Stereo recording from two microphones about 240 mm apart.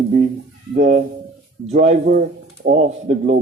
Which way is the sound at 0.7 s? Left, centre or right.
Right.